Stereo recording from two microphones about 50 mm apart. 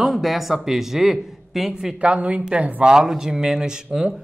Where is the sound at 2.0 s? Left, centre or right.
Right.